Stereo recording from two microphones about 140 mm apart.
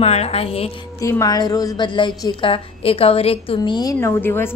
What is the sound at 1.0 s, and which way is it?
A woman's voice, 25° left (ahead or behind).